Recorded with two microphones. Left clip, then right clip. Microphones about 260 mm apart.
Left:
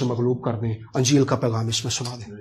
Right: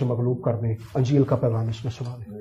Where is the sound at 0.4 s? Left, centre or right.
Left.